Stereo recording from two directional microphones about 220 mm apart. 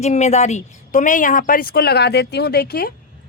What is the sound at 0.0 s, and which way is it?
A woman's voice, 30° left (ahead or behind).